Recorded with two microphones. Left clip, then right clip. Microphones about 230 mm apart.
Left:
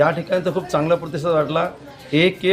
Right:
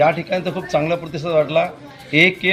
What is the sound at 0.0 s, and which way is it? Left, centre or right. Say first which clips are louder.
Speech: right 1 dB; centre.